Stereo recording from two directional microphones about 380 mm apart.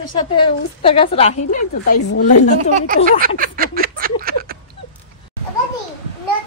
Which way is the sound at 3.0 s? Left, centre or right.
Right.